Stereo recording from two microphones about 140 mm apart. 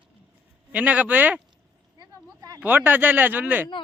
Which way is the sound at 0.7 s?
10° right (ahead or behind).